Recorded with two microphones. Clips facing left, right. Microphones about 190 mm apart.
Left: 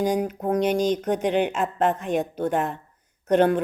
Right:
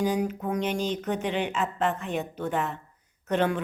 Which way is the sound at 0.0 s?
50° left (ahead or behind).